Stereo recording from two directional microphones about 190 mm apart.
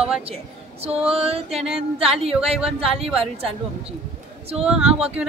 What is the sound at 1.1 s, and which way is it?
Speech, 30° right (ahead or behind).